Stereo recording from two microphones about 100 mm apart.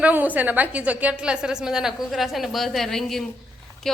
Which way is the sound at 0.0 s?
15° right (ahead or behind).